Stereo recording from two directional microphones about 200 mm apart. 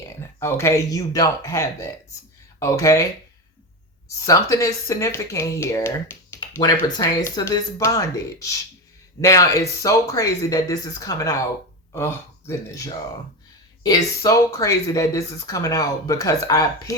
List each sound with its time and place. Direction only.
0.2 s speech: 15° left (ahead or behind)
4.3 s speech: 15° left (ahead or behind)